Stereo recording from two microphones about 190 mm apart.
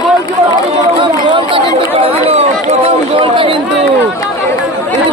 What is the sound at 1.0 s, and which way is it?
Chatter, 25° right (ahead or behind).